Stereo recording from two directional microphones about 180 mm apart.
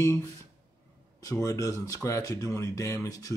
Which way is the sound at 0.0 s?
15° left (ahead or behind).